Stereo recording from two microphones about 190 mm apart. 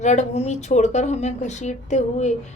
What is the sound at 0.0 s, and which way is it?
A woman's voice, 35° left (ahead or behind).